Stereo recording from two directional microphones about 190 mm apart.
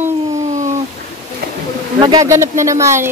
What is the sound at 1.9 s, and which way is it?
Speech, 20° right (ahead or behind).